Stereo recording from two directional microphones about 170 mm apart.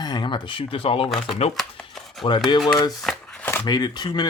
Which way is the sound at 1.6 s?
Centre (ahead or behind).